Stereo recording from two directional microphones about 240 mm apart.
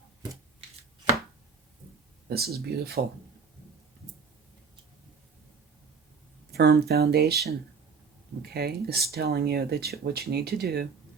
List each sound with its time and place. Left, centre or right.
2.3 s speech: right
6.5 s speech: right